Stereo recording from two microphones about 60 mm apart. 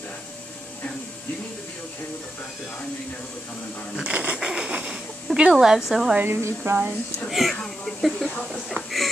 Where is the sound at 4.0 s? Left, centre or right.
Right.